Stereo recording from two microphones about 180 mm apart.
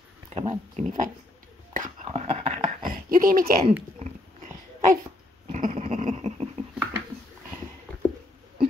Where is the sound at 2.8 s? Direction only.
50° right (ahead or behind).